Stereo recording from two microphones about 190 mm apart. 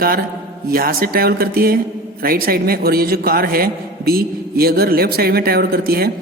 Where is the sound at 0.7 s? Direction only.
50° right (ahead or behind).